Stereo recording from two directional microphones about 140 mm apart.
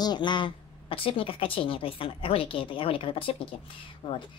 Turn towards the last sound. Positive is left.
turn(degrees=40)  # may be behind; listen again after turning